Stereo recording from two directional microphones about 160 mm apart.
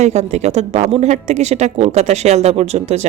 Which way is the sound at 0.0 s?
45° right (ahead or behind).